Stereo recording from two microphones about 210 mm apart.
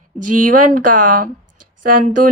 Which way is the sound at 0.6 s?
40° right (ahead or behind).